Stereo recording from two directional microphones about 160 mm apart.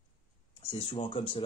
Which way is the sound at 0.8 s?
35° left (ahead or behind).